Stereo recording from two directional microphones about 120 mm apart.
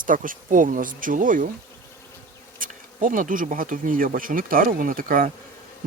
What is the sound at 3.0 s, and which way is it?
Speech, 90° right.